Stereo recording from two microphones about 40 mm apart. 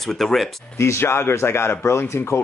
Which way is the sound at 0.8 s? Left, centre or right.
Left.